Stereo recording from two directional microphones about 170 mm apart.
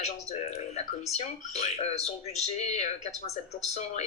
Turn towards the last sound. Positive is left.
turn(degrees=40)  # may be behind; listen again after turning